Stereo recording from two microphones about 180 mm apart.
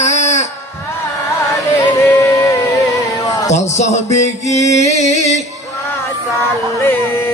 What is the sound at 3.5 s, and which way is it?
Music, 40° left (ahead or behind).